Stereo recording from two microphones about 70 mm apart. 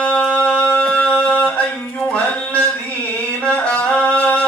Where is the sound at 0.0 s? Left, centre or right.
Centre.